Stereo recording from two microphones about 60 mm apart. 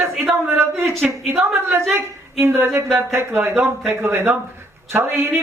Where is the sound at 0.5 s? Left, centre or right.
Right.